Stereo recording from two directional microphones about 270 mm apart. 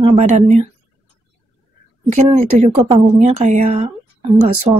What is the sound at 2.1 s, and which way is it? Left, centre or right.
A woman's voice, right.